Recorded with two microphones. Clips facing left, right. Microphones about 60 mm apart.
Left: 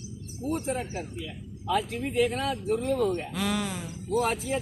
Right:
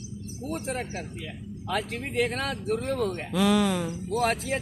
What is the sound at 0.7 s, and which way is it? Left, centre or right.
Speech, right.